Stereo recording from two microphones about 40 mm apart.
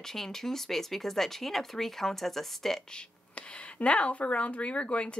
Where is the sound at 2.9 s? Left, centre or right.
Left.